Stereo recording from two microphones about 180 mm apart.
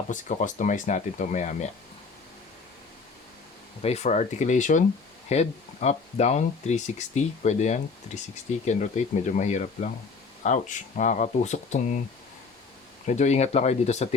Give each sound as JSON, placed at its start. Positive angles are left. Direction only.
{"t": 0.1, "sound": "speech", "side_deg": 45}
{"t": 3.8, "sound": "speech", "side_deg": 35}
{"t": 13.1, "sound": "speech", "side_deg": 40}